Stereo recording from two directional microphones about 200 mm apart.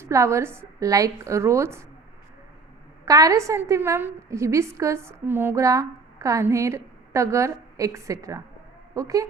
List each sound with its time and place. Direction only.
0.0 s a woman's voice: 15° right (ahead or behind)
3.1 s a woman's voice: 15° right (ahead or behind)